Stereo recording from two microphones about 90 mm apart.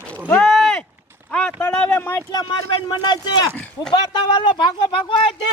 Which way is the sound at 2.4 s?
55° left (ahead or behind).